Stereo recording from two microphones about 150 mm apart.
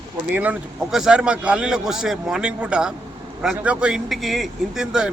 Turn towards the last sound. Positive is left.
turn(degrees=-5)  # may be behind; listen again after turning